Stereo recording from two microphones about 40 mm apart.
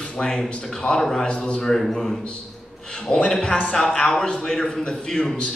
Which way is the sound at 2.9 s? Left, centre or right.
Left.